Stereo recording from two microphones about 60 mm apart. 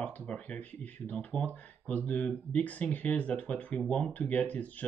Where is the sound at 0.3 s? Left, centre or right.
Left.